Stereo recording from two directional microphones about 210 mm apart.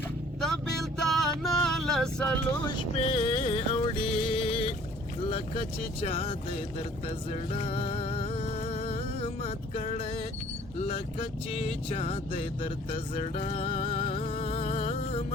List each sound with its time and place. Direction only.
0.4 s music: centre (ahead or behind)
2.9 s music: 30° left (ahead or behind)
5.3 s vehicle: 25° left (ahead or behind)
7.3 s music: 30° left (ahead or behind)
10.8 s vehicle: 25° left (ahead or behind)